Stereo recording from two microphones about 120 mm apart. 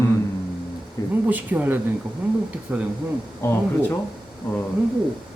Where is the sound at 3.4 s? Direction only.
20° left (ahead or behind).